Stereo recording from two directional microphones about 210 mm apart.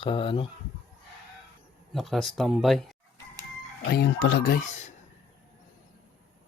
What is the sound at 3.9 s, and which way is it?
Speech, 50° left (ahead or behind).